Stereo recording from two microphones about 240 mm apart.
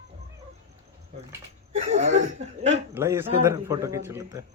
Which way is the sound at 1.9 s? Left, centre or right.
Right.